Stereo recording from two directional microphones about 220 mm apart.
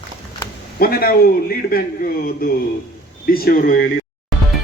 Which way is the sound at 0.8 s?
45° left (ahead or behind).